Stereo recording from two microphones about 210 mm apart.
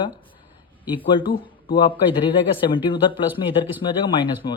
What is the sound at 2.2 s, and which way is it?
Speech, 25° left (ahead or behind).